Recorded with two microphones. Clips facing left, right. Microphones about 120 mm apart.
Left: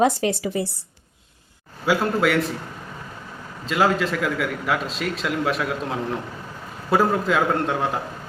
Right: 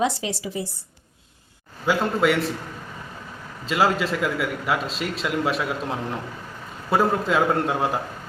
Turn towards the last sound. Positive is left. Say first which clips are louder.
# even
turn(degrees=0)  # may be behind; listen again after turning